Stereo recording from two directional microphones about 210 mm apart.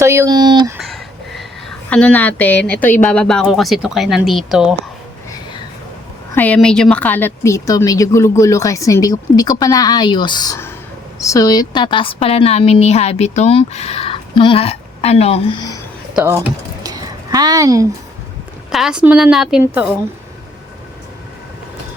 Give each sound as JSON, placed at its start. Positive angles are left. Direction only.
{"t": 0.0, "sound": "speech", "side_deg": -15}
{"t": 0.8, "sound": "a sound", "side_deg": 0}
{"t": 1.9, "sound": "speech", "side_deg": 5}
{"t": 6.3, "sound": "a woman's voice", "side_deg": 5}
{"t": 16.1, "sound": "speech", "side_deg": -10}
{"t": 16.8, "sound": "a sound", "side_deg": -15}
{"t": 18.7, "sound": "speech", "side_deg": 0}